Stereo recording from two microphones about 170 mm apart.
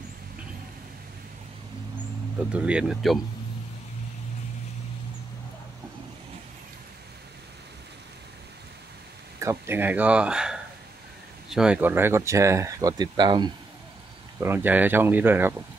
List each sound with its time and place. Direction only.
2.5 s speech: 5° right (ahead or behind)
9.4 s speech: 15° right (ahead or behind)
14.4 s speech: 10° right (ahead or behind)